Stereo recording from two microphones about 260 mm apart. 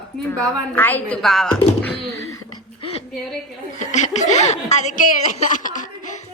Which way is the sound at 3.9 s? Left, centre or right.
Left.